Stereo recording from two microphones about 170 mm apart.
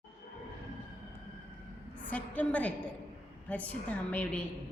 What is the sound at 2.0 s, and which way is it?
A woman's voice, 10° left (ahead or behind).